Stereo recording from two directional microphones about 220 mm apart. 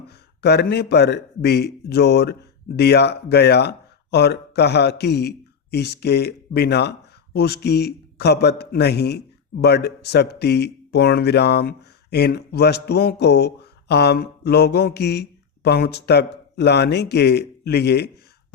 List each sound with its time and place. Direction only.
0.1 s a man's voice: 45° left (ahead or behind)